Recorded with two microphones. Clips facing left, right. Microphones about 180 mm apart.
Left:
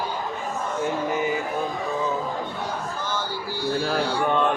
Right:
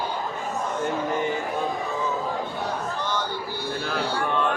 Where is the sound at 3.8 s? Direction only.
35° left (ahead or behind).